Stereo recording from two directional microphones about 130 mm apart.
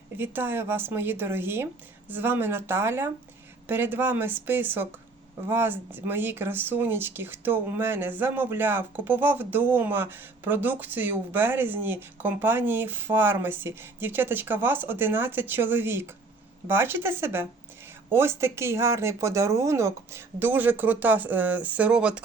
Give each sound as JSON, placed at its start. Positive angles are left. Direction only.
{"t": 0.2, "sound": "speech", "side_deg": -15}